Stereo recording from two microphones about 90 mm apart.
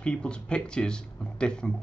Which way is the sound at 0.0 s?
10° left (ahead or behind).